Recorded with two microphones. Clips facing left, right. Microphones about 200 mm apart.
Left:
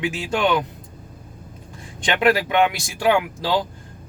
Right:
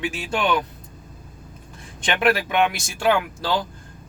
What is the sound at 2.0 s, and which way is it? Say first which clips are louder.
Speech: left 2 dB; 15° left (ahead or behind).